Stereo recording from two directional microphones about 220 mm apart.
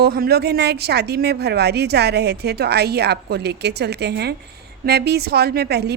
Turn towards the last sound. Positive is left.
turn(degrees=-50)  # may be behind; listen again after turning